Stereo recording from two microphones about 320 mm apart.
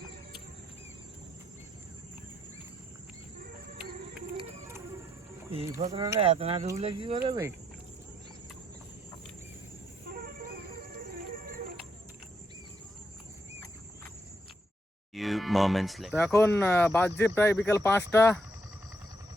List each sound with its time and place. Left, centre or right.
5.5 s speech: centre
15.1 s speech: centre